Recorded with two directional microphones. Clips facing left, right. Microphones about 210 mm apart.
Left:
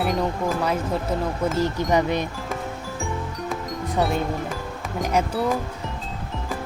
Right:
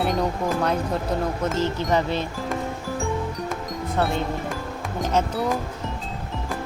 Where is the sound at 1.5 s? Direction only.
15° left (ahead or behind).